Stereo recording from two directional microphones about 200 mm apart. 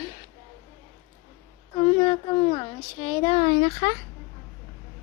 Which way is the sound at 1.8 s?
25° left (ahead or behind).